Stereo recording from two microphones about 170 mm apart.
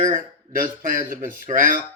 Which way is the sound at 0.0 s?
50° right (ahead or behind).